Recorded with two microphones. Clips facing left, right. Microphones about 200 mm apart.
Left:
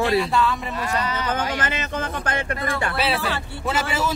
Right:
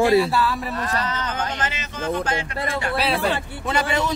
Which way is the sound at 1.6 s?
55° left (ahead or behind).